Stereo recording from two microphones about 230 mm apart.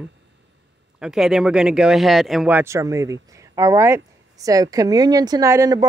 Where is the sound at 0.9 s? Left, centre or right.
Centre.